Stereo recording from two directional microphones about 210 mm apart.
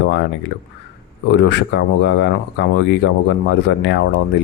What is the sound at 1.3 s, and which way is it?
Speech, 55° left (ahead or behind).